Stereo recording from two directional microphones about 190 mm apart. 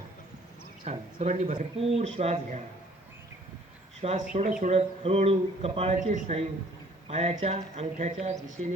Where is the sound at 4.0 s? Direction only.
35° right (ahead or behind).